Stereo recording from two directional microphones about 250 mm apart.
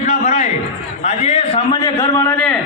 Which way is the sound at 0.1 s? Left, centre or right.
Left.